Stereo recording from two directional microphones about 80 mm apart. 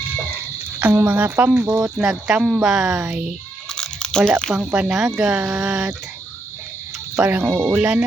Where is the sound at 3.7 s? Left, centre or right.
Centre.